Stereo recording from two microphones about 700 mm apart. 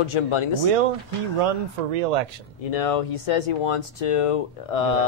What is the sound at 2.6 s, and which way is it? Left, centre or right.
Speech, left.